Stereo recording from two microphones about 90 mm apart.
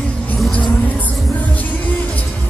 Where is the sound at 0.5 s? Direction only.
15° left (ahead or behind).